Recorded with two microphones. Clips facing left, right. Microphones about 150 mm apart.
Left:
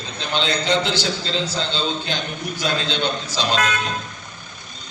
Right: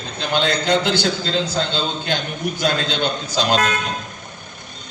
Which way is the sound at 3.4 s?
45° right (ahead or behind).